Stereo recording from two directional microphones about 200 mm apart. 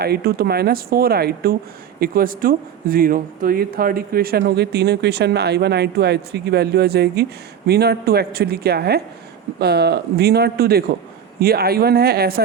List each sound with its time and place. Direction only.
0.0 s speech: 50° right (ahead or behind)